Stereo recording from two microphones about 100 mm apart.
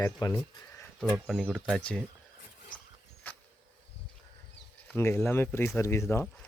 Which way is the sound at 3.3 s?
20° left (ahead or behind).